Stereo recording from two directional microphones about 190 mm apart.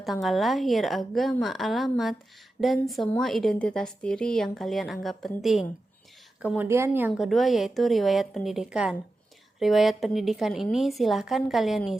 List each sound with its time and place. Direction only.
0.0 s a woman's voice: centre (ahead or behind)
7.3 s a woman's voice: centre (ahead or behind)